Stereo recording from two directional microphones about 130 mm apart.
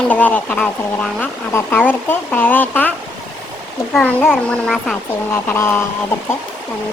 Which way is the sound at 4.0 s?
10° left (ahead or behind).